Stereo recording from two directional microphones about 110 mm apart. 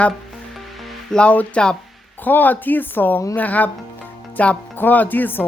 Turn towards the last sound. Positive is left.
turn(degrees=15)  # may be behind; listen again after turning